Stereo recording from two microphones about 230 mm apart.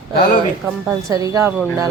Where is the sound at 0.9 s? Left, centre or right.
Centre.